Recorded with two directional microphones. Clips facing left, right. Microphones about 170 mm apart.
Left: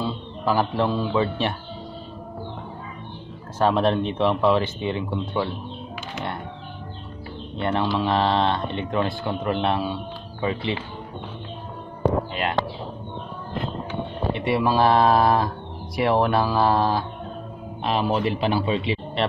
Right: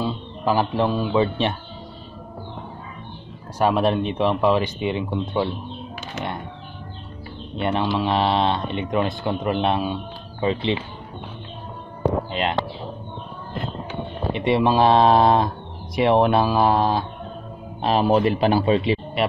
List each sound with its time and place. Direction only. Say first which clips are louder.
0.0 s a man's voice: right 2 dB; 15° right (ahead or behind)
3.5 s speech: right 1 dB; 10° right (ahead or behind)
7.5 s speech: right 1 dB; 15° right (ahead or behind)
12.3 s speech: right 2 dB; 25° right (ahead or behind)
14.3 s speech: right 3 dB; 20° right (ahead or behind)
17.8 s speech: right 5 dB; 40° right (ahead or behind)
19.2 s speech: right 1 dB; 10° right (ahead or behind)